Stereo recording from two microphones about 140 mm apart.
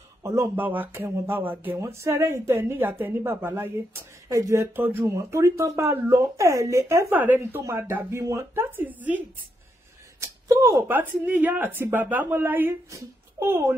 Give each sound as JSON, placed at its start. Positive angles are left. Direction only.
{"t": 0.2, "sound": "speech", "side_deg": -15}
{"t": 10.2, "sound": "speech", "side_deg": -20}